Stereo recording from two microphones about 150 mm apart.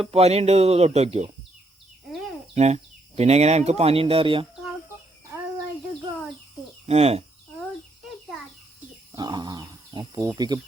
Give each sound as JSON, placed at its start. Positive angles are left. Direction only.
{"t": 0.0, "sound": "speech", "side_deg": -45}
{"t": 2.6, "sound": "speech", "side_deg": -45}
{"t": 6.8, "sound": "speech", "side_deg": -45}
{"t": 9.1, "sound": "speech", "side_deg": -30}